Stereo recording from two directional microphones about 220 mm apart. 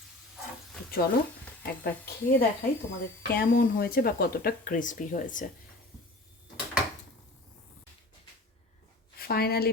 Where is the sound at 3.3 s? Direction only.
45° left (ahead or behind).